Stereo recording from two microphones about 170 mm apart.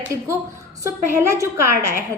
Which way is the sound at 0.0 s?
15° right (ahead or behind).